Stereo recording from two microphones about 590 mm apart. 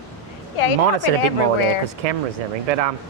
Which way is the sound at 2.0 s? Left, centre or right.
Right.